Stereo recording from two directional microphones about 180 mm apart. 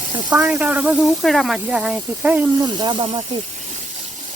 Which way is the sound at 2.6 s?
25° right (ahead or behind).